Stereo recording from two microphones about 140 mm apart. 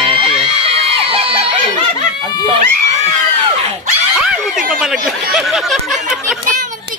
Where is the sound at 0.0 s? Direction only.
40° right (ahead or behind).